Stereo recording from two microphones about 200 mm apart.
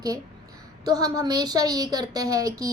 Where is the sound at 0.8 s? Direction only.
20° right (ahead or behind).